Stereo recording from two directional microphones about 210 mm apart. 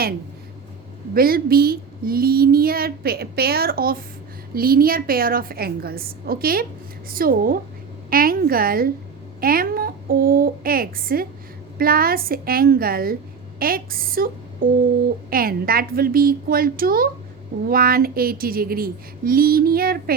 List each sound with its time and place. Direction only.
1.1 s a woman's voice: 45° right (ahead or behind)